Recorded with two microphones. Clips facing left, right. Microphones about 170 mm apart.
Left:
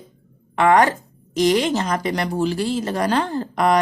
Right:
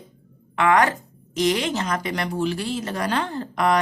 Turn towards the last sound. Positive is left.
turn(degrees=35)  # may be behind; listen again after turning